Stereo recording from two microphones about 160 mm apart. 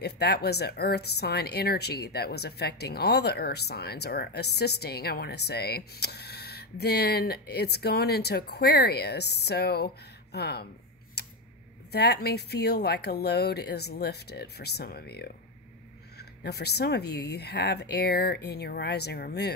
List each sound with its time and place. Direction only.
0.0 s speech: 90° left
11.2 s a sound: 90° left
11.9 s speech: 90° left